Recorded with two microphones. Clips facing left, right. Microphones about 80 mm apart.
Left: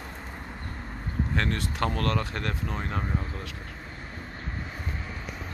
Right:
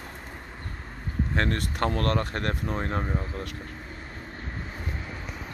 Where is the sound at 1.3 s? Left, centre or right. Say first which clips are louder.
Right 2 dB; right.